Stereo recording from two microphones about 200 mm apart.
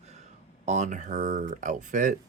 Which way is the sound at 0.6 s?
35° right (ahead or behind).